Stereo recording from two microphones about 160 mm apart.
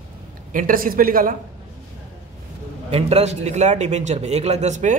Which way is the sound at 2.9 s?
40° right (ahead or behind).